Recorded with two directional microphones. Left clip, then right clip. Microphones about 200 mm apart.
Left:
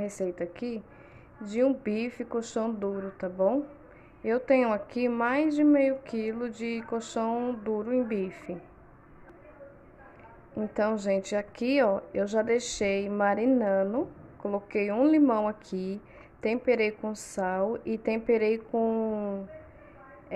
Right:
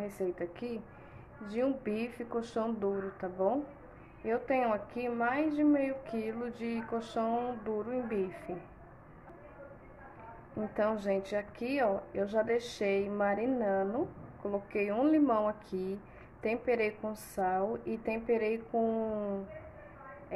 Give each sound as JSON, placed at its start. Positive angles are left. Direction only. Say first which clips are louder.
{"t": 0.0, "sound": "speech", "louder": "left 4 dB", "side_deg": 30}
{"t": 10.5, "sound": "speech", "louder": "left 4 dB", "side_deg": 25}